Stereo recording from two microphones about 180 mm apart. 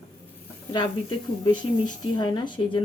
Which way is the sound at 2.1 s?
25° left (ahead or behind).